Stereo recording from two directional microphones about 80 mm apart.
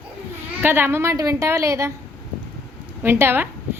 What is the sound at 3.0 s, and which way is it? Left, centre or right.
Speech, right.